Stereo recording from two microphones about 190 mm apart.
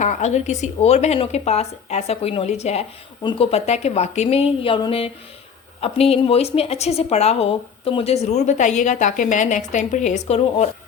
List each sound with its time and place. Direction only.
0.0 s speech: 40° left (ahead or behind)